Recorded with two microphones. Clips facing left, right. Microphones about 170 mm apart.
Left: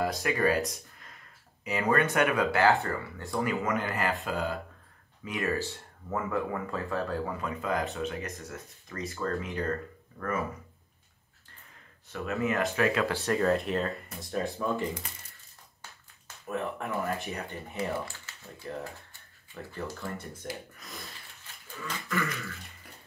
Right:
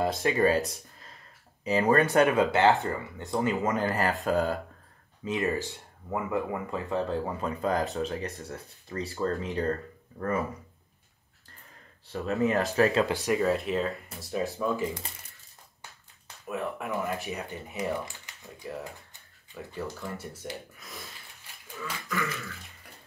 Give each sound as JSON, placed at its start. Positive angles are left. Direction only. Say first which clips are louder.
{"t": 0.0, "sound": "speech", "louder": "right 3 dB", "side_deg": -25}
{"t": 1.6, "sound": "speech", "louder": "right 4 dB", "side_deg": -35}
{"t": 5.2, "sound": "speech", "louder": "right 2 dB", "side_deg": -20}
{"t": 12.1, "sound": "speech", "louder": "right 4 dB", "side_deg": -35}
{"t": 13.1, "sound": "speech", "louder": "right 2 dB", "side_deg": -15}
{"t": 13.4, "sound": "speech", "louder": "even", "side_deg": 0}
{"t": 16.4, "sound": "speech", "louder": "even", "side_deg": 0}
{"t": 17.7, "sound": "speech", "louder": "right 1 dB", "side_deg": -15}